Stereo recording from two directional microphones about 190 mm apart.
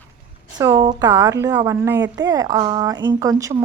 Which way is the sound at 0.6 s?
20° right (ahead or behind).